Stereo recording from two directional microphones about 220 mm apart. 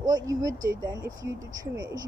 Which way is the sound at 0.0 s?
15° right (ahead or behind).